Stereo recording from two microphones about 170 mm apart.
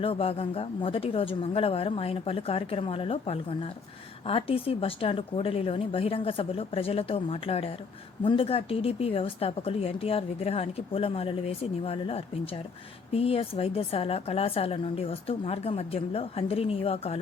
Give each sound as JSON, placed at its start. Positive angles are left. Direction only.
{"t": 0.0, "sound": "a woman's voice", "side_deg": 35}